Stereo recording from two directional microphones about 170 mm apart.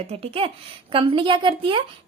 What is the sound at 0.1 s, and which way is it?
A woman's voice, 35° right (ahead or behind).